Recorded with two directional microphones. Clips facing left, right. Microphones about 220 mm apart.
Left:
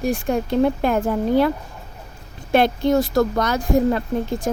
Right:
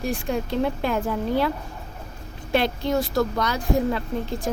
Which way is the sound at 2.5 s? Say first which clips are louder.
Left 5 dB; 45° left (ahead or behind).